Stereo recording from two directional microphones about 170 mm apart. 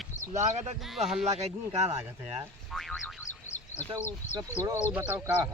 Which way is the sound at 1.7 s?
40° right (ahead or behind).